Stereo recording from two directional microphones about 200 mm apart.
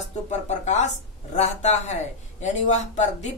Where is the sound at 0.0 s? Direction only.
35° left (ahead or behind).